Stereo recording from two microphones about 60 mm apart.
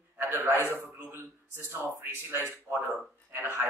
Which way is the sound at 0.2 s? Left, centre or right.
Right.